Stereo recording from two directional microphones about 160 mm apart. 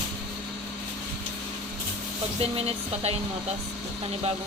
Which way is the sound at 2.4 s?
40° right (ahead or behind).